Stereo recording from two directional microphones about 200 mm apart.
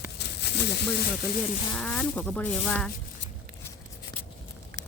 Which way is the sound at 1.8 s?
5° left (ahead or behind).